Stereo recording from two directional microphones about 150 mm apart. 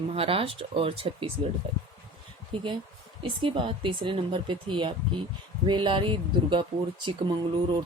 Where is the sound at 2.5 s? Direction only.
35° right (ahead or behind).